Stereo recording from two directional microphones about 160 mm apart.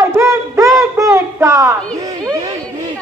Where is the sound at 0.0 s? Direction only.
20° right (ahead or behind).